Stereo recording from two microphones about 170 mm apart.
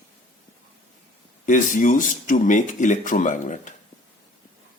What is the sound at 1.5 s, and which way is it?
Speech, 50° left (ahead or behind).